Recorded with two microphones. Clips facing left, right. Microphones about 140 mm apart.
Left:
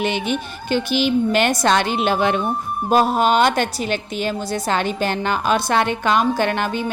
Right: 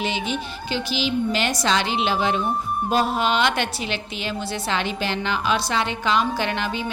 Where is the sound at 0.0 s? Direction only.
55° left (ahead or behind).